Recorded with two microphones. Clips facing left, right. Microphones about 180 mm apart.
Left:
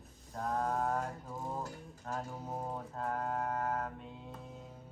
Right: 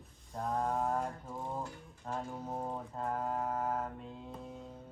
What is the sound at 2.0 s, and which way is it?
Music, 5° left (ahead or behind).